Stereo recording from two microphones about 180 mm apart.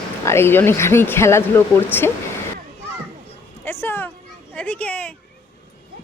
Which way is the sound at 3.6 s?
10° left (ahead or behind).